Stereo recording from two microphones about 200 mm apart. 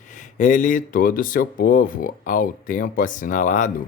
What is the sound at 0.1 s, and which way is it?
Speech, 40° left (ahead or behind).